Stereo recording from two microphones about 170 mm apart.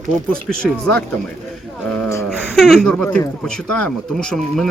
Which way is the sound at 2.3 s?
Centre (ahead or behind).